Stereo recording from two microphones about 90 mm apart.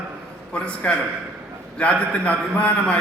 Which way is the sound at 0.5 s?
15° left (ahead or behind).